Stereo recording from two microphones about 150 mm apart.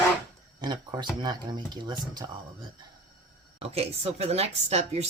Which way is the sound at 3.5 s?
45° right (ahead or behind).